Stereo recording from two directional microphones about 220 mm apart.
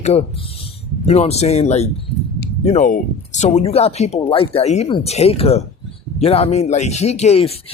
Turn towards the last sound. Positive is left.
turn(degrees=30)  # may be behind; listen again after turning